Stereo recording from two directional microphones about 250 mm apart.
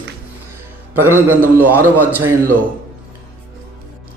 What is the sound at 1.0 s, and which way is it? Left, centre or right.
A man's voice, centre.